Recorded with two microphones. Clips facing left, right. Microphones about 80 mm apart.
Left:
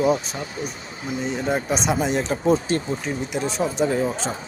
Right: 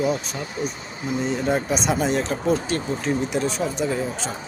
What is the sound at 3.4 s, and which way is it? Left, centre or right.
Speech, left.